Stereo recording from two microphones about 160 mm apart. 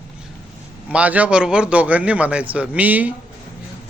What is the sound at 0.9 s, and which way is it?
A man's voice, 10° right (ahead or behind).